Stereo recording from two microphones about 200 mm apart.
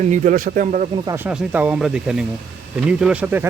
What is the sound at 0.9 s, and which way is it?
Speech, 20° right (ahead or behind).